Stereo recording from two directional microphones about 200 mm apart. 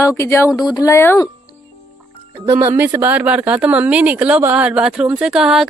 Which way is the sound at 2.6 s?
15° right (ahead or behind).